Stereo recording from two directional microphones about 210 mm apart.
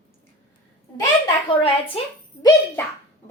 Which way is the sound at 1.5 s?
25° left (ahead or behind).